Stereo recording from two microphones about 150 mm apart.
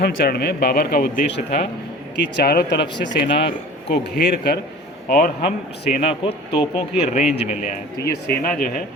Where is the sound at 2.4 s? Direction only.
90° left.